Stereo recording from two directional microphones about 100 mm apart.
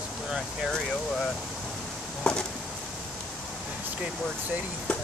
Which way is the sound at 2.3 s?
10° left (ahead or behind).